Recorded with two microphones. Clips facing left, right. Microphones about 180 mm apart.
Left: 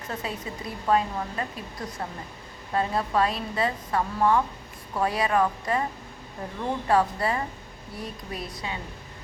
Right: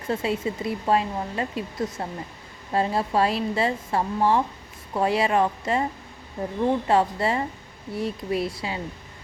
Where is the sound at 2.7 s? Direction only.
30° right (ahead or behind).